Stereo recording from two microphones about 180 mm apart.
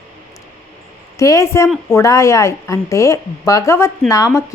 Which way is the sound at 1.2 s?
15° left (ahead or behind).